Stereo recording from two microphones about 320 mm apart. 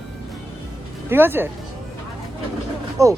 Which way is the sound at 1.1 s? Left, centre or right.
Centre.